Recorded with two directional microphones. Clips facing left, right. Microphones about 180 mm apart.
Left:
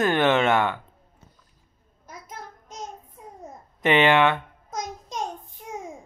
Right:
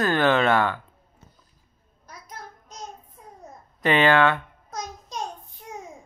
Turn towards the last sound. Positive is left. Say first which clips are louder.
# left 2 dB
turn(degrees=15)  # may be behind; listen again after turning